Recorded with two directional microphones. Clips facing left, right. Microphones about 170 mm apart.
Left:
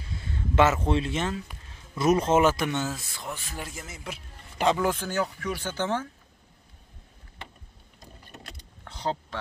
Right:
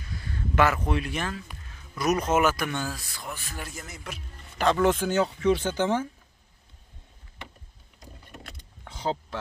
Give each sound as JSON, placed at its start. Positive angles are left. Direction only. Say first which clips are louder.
{"t": 0.0, "sound": "speech", "louder": "even", "side_deg": 25}
{"t": 3.8, "sound": "speech", "louder": "left 1 dB", "side_deg": 5}
{"t": 4.9, "sound": "speech", "louder": "right 4 dB", "side_deg": -20}
{"t": 8.8, "sound": "mechanisms", "louder": "right 1 dB", "side_deg": -10}